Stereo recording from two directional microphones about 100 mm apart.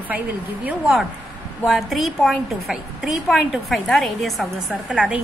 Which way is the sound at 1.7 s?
Centre (ahead or behind).